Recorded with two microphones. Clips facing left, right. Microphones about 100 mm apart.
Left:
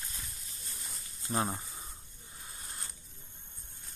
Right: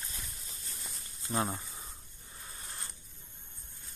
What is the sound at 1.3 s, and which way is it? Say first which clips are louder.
Speech: even; 30° left (ahead or behind).